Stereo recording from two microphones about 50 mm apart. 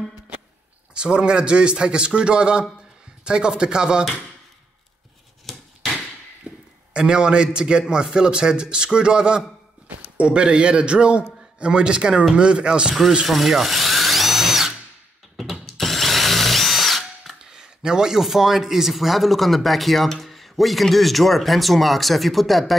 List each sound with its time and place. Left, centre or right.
0.9 s a man's voice: centre
5.5 s a sound: centre
6.5 s a sound: centre
6.9 s a man's voice: centre
13.3 s drill: centre
15.3 s ratchet: centre
15.6 s drill: centre